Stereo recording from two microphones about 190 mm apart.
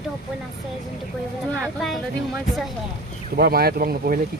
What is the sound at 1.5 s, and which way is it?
Speech, 5° right (ahead or behind).